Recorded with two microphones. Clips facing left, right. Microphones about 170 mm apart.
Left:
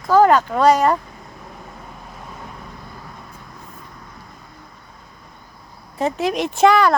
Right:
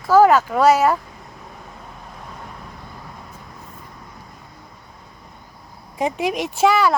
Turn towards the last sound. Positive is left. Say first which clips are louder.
# left 2 dB
turn(degrees=-5)  # may be behind; listen again after turning